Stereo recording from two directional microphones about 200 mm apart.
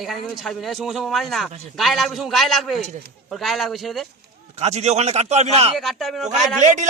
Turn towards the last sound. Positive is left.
turn(degrees=-35)  # may be behind; listen again after turning